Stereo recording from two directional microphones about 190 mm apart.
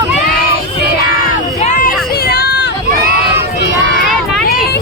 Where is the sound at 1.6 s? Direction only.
40° left (ahead or behind); by 2.6 s 60° left (ahead or behind).